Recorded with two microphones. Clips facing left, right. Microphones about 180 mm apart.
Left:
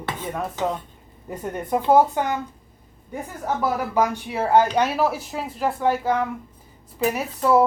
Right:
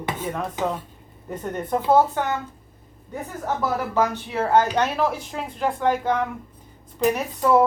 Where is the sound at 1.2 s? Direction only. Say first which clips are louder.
Even; 10° left (ahead or behind).